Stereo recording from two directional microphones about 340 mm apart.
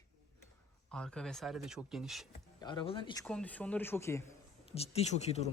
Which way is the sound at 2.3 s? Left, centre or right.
Centre.